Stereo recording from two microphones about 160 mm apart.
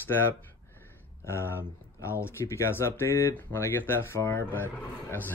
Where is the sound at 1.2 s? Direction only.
15° left (ahead or behind).